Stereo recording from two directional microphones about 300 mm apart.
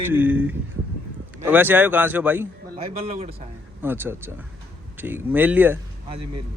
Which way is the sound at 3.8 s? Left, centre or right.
Centre.